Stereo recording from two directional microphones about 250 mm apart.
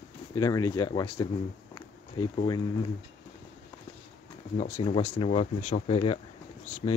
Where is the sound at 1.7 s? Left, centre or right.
Centre.